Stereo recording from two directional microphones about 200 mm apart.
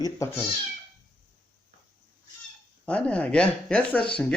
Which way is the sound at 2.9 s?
5° left (ahead or behind).